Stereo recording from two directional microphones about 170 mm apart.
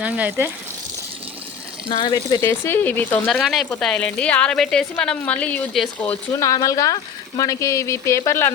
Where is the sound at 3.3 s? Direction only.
Centre (ahead or behind).